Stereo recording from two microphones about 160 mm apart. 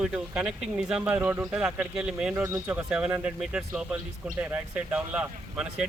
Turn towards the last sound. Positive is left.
turn(degrees=-5)  # may be behind; listen again after turning